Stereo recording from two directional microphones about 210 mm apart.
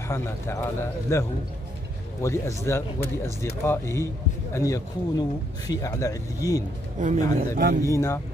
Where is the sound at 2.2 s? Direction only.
15° left (ahead or behind).